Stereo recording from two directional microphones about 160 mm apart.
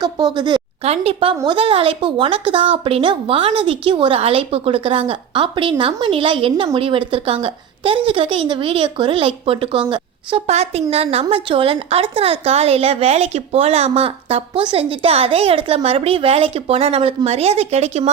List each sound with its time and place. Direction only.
0.3 s a woman's voice: 30° right (ahead or behind)